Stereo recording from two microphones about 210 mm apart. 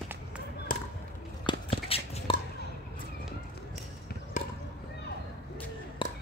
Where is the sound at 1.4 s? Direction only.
25° left (ahead or behind).